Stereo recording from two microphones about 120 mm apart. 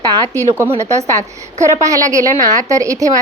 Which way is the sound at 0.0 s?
30° right (ahead or behind).